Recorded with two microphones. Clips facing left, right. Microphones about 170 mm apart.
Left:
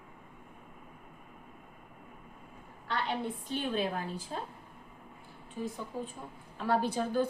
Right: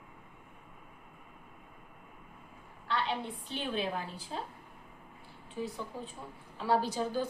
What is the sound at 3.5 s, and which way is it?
Speech, 45° left (ahead or behind).